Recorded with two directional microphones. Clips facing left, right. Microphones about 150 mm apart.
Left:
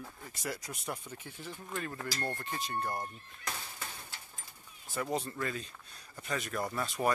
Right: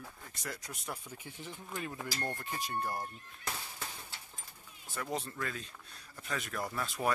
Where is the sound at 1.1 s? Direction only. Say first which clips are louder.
Left 1 dB; 15° right (ahead or behind).